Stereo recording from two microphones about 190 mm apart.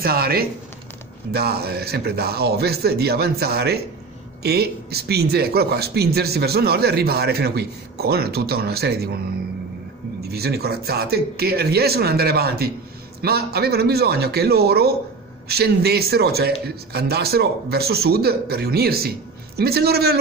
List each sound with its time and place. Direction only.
0.0 s speech: 50° right (ahead or behind)
10.3 s speech: 55° right (ahead or behind)